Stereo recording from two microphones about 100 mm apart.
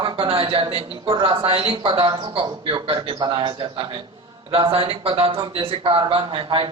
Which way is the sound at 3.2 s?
45° right (ahead or behind).